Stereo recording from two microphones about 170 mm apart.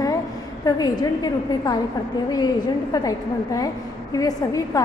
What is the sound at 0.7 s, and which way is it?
A woman's voice, 20° left (ahead or behind).